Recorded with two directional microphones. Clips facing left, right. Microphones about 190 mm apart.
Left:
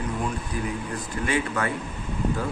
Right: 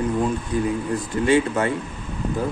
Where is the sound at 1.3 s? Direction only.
25° right (ahead or behind).